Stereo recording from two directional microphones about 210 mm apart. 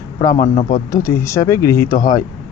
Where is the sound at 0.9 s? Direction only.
15° left (ahead or behind).